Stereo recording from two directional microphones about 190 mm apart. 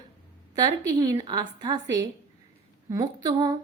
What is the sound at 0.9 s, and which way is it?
A woman's voice, 20° right (ahead or behind).